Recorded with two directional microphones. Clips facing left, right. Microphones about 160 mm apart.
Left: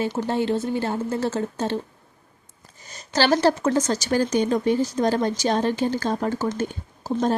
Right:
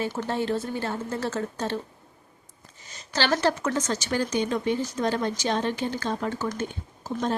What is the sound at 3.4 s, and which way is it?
Speech, 30° left (ahead or behind).